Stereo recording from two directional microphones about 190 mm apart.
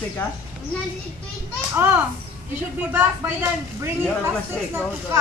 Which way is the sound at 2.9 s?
10° right (ahead or behind).